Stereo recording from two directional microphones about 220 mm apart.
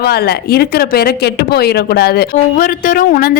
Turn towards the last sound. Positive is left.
turn(degrees=40)  # may be behind; listen again after turning